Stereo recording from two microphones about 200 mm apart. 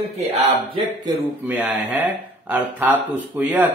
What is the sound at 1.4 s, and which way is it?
Speech, 5° right (ahead or behind).